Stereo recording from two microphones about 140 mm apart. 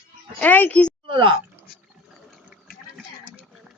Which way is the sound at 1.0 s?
40° right (ahead or behind).